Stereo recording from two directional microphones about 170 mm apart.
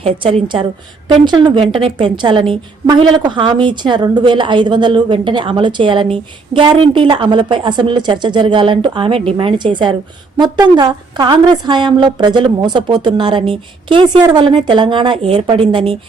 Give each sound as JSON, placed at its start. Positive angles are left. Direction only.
{"t": 0.0, "sound": "a woman's voice", "side_deg": -35}